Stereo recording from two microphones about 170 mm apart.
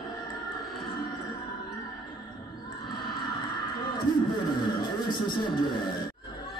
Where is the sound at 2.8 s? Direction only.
25° left (ahead or behind).